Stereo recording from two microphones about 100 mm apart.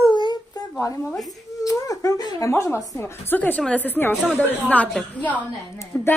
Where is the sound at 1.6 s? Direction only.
35° left (ahead or behind).